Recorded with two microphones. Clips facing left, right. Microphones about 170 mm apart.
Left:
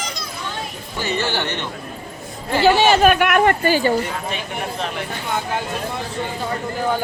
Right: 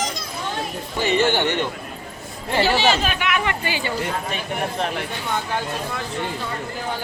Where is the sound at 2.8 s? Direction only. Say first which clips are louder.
Left 7 dB; 55° left (ahead or behind).